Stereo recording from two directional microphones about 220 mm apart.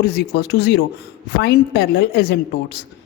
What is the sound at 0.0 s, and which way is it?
Speech, 50° left (ahead or behind).